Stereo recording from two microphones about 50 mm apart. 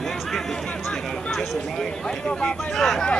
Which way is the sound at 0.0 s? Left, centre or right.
Centre.